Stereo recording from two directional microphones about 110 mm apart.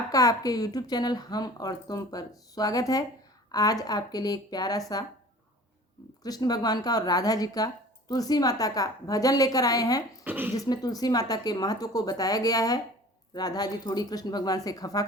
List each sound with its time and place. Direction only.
0.1 s speech: 30° left (ahead or behind)
6.2 s speech: 35° left (ahead or behind)
10.2 s speech: 15° right (ahead or behind)
10.5 s speech: 35° left (ahead or behind)